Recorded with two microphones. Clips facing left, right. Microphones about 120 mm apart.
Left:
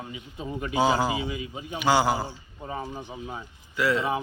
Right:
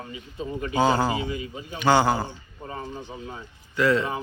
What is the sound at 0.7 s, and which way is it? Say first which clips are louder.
A man's voice: right 1 dB; 10° left (ahead or behind).